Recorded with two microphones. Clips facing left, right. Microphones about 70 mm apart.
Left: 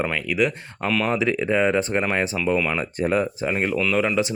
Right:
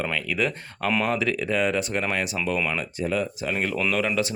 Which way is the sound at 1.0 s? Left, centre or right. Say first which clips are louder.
Left 3 dB; left.